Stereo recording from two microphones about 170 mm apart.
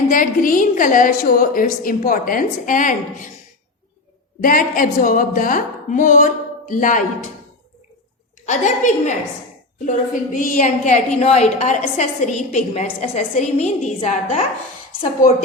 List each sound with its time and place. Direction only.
0.1 s a woman's voice: 55° left (ahead or behind)
4.4 s a woman's voice: 55° left (ahead or behind)
8.4 s a woman's voice: 45° left (ahead or behind)